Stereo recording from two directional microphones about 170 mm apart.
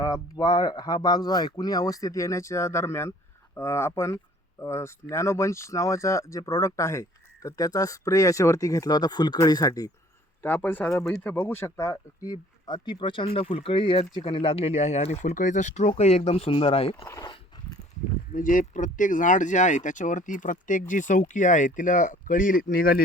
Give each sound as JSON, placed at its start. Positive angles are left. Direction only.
{"t": 0.0, "sound": "speech", "side_deg": 20}
{"t": 18.3, "sound": "speech", "side_deg": 50}